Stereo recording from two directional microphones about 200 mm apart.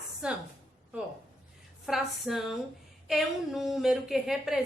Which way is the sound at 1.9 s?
Centre (ahead or behind).